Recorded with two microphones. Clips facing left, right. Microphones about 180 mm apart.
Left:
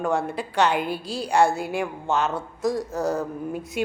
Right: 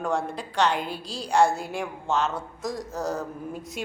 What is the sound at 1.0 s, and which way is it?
Speech, 55° left (ahead or behind).